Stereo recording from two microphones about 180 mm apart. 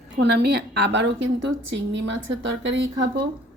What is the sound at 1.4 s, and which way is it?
A woman's voice, 80° right.